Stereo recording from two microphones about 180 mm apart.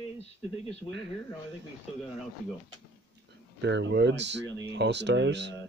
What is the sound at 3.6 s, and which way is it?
Speech, 75° right (ahead or behind).